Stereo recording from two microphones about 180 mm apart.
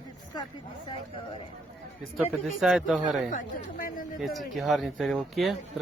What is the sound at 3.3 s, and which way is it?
Speech, 50° left (ahead or behind).